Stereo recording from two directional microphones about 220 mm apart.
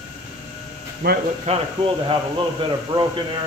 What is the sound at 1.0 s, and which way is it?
Speech, 45° right (ahead or behind).